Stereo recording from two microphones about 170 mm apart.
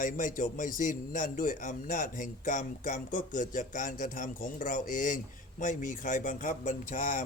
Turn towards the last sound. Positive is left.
turn(degrees=50)  # may be behind; listen again after turning